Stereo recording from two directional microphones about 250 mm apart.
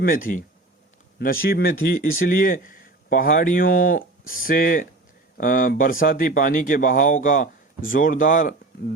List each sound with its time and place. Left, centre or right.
0.0 s speech: left